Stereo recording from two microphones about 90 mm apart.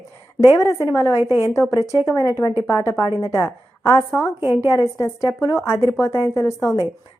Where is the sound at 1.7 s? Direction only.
40° left (ahead or behind).